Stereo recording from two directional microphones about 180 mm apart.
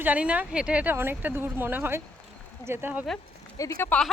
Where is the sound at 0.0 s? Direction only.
10° right (ahead or behind).